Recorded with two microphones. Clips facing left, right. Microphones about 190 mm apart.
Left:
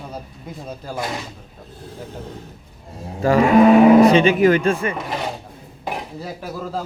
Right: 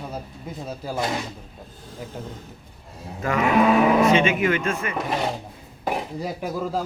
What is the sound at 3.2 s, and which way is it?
A man's voice, 35° left (ahead or behind).